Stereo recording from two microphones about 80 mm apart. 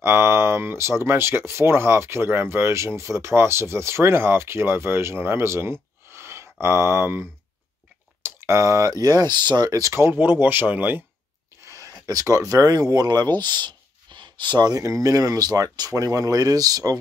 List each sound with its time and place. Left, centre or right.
0.0 s speech: right
9.7 s speech: right
9.9 s speech: right
11.6 s speech: right
14.8 s speech: right